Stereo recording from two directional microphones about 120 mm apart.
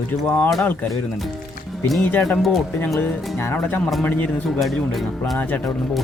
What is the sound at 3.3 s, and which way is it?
Speech, 15° left (ahead or behind).